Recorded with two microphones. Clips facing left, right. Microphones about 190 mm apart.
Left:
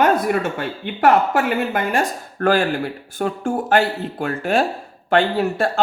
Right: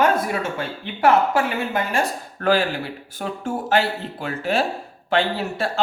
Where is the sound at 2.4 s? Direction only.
50° left (ahead or behind).